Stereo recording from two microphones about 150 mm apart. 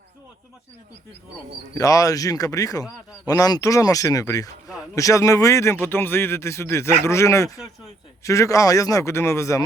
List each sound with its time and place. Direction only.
1.7 s speech: 20° left (ahead or behind)